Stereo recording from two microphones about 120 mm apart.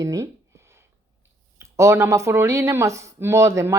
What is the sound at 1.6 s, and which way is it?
A woman's voice, 25° right (ahead or behind).